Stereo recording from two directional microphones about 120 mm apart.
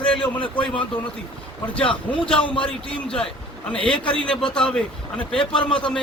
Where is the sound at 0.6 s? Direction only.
45° left (ahead or behind).